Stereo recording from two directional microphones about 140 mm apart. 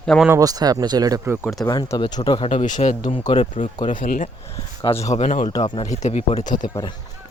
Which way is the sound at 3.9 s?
75° left (ahead or behind).